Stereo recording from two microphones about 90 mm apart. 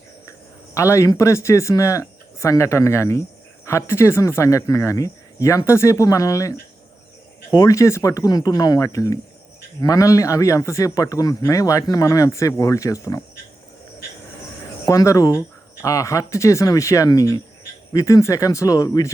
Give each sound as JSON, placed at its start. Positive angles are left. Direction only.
{"t": 0.3, "sound": "speech", "side_deg": 35}
{"t": 14.8, "sound": "speech", "side_deg": 40}